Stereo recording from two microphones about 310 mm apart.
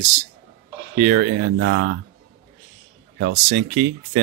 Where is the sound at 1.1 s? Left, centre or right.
Right.